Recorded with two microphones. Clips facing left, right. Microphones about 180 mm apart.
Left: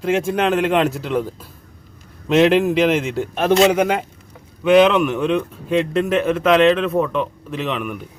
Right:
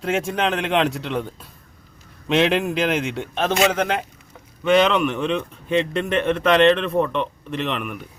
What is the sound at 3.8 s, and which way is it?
Speech, 10° left (ahead or behind).